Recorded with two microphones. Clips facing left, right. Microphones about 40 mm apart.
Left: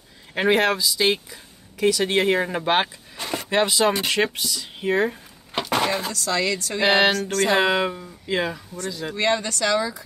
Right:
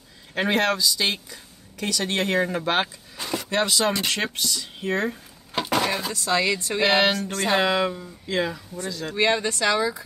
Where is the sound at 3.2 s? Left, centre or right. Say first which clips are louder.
Left 1 dB; left.